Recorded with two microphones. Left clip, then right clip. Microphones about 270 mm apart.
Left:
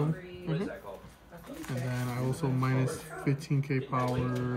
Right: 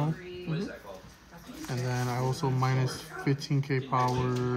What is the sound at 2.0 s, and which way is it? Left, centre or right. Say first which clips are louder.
Speech: right 4 dB; right.